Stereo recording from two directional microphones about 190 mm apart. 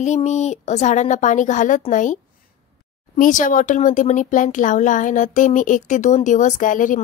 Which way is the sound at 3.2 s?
45° left (ahead or behind).